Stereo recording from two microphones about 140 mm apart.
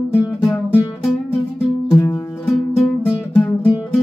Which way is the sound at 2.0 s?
15° left (ahead or behind).